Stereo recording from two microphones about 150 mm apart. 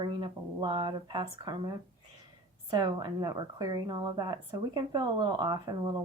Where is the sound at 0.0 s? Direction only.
30° right (ahead or behind).